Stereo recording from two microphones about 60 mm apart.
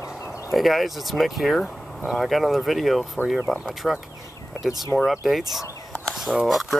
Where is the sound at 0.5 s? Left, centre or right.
Centre.